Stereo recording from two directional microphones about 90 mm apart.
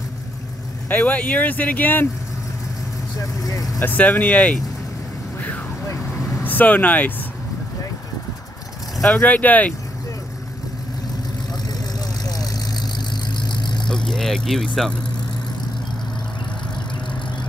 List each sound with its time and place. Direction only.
0.8 s speech: 20° left (ahead or behind)
3.4 s speech: 40° left (ahead or behind)
3.8 s speech: 20° left (ahead or behind)
6.4 s speech: 20° left (ahead or behind)
9.1 s speech: 15° left (ahead or behind)
12.3 s vehicle: 50° left (ahead or behind)
13.8 s vehicle: 5° left (ahead or behind)